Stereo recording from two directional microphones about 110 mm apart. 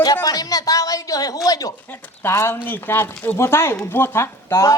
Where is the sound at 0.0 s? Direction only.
35° left (ahead or behind).